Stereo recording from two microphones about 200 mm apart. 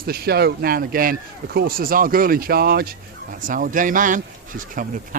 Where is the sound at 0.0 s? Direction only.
50° right (ahead or behind).